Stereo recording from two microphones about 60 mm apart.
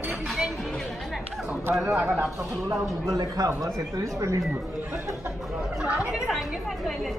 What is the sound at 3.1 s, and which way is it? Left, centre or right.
Speech, right.